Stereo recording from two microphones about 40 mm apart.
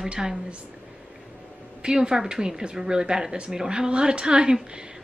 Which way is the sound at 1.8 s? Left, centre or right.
Centre.